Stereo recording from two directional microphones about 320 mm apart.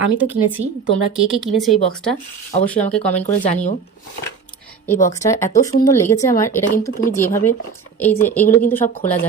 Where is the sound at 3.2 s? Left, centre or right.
Left.